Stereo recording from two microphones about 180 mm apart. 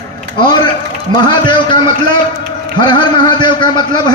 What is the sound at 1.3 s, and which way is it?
A man's voice, 25° left (ahead or behind).